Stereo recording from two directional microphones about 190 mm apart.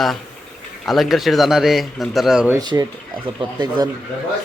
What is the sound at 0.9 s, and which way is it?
Speech, centre (ahead or behind).